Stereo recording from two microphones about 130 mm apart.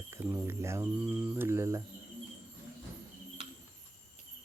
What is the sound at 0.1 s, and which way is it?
Cricket, 20° right (ahead or behind).